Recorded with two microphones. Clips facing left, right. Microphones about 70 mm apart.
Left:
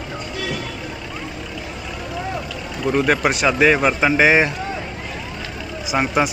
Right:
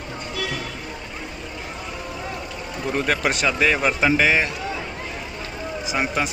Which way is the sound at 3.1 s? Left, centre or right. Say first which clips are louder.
Left 2 dB; centre.